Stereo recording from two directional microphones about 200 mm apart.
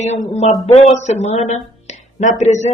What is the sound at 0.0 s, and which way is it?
Speech, 35° left (ahead or behind).